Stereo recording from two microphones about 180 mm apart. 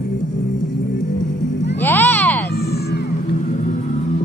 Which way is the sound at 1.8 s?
10° left (ahead or behind).